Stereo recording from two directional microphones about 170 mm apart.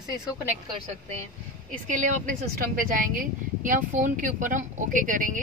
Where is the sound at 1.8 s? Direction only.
50° right (ahead or behind).